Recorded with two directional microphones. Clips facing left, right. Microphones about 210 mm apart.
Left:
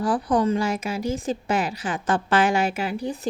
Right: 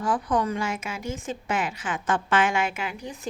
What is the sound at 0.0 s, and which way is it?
A woman's voice, 35° left (ahead or behind).